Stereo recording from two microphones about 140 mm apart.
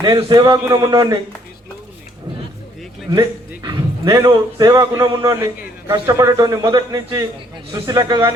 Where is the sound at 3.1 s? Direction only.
30° right (ahead or behind).